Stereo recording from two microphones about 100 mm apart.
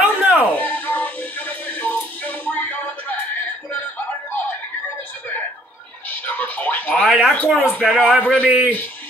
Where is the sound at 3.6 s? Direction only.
15° left (ahead or behind).